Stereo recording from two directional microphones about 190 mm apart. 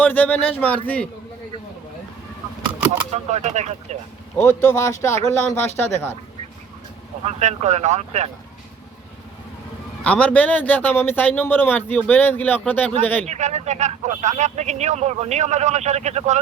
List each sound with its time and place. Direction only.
0.0 s a man's voice: 10° left (ahead or behind)
3.2 s speech: 35° right (ahead or behind)
4.4 s a man's voice: 10° left (ahead or behind)
7.3 s speech: 35° right (ahead or behind)
10.0 s a man's voice: 5° left (ahead or behind)
13.2 s speech: 35° right (ahead or behind)